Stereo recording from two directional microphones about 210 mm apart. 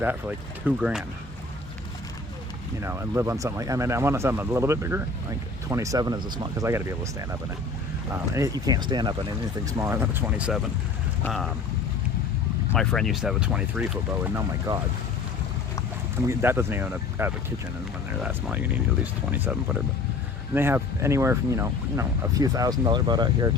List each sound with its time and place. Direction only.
0.0 s speech: 10° right (ahead or behind)
2.8 s speech: 10° right (ahead or behind)
12.7 s speech: centre (ahead or behind)
16.2 s speech: 10° right (ahead or behind)
20.5 s speech: 10° right (ahead or behind)